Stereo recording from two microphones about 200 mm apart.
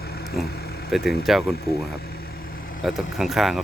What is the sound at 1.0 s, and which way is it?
Speech, 50° left (ahead or behind).